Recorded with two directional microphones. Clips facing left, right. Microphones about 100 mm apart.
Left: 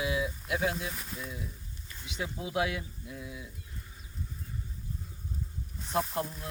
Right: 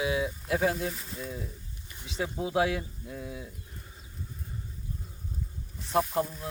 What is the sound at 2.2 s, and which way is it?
Speech, 25° right (ahead or behind).